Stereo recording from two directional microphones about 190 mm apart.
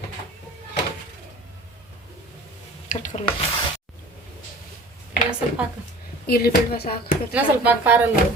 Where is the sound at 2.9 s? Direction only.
40° left (ahead or behind).